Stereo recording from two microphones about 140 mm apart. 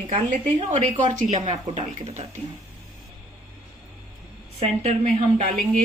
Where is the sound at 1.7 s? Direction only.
45° right (ahead or behind).